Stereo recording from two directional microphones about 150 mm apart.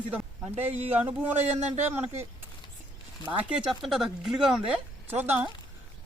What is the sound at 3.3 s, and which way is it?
Speech, 5° right (ahead or behind).